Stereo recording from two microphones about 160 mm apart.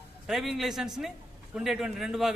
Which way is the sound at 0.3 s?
Centre (ahead or behind).